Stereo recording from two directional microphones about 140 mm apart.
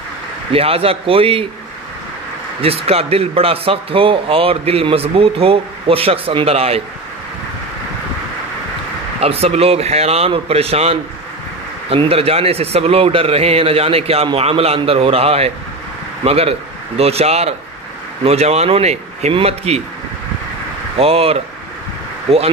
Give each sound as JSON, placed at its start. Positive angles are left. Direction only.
{"t": 0.5, "sound": "a man's voice", "side_deg": -45}
{"t": 2.6, "sound": "a man's voice", "side_deg": -45}
{"t": 9.2, "sound": "a man's voice", "side_deg": -45}
{"t": 21.0, "sound": "a man's voice", "side_deg": -45}